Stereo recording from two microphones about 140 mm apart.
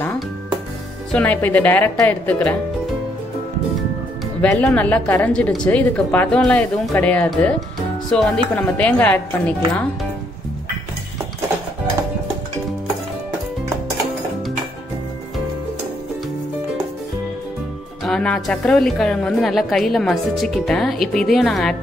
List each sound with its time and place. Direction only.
1.1 s a woman's voice: 10° left (ahead or behind)
4.4 s a woman's voice: 5° left (ahead or behind)
18.0 s a woman's voice: 5° left (ahead or behind)